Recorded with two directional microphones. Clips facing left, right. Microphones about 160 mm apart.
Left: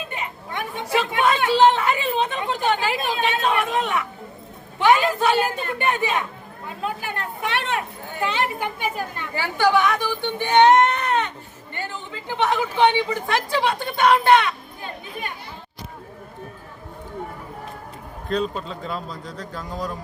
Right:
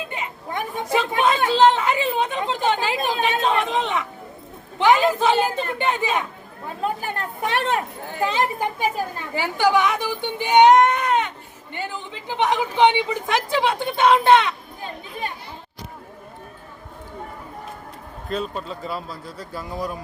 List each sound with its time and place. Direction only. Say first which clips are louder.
0.9 s speech: even; 20° right (ahead or behind)
6.8 s speech: right 2 dB; 40° right (ahead or behind)
9.3 s a man's voice: even; 15° right (ahead or behind)
18.3 s speech: left 2 dB; 5° right (ahead or behind)